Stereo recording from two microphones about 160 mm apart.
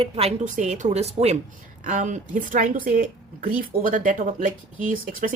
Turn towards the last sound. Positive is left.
turn(degrees=-55)  # may be behind; listen again after turning